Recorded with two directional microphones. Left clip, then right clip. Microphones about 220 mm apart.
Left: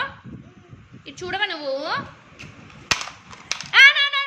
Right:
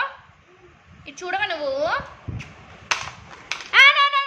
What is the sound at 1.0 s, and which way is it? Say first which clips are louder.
Speech: right 1 dB; 10° right (ahead or behind).